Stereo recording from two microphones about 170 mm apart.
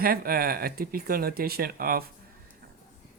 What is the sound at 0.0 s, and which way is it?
Speech, 60° right (ahead or behind).